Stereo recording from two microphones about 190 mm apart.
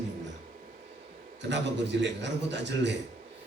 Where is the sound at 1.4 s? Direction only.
65° right (ahead or behind).